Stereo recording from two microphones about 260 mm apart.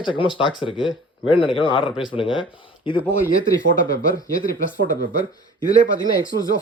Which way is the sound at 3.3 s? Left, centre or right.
Left.